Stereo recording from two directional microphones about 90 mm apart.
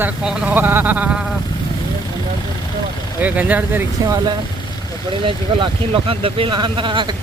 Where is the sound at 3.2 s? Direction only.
20° right (ahead or behind).